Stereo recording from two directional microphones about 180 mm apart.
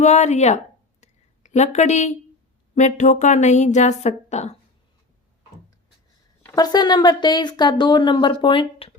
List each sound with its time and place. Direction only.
0.0 s speech: 40° left (ahead or behind)
1.0 s a sound: 40° left (ahead or behind)
2.7 s speech: 45° left (ahead or behind)
6.4 s speech: 20° left (ahead or behind)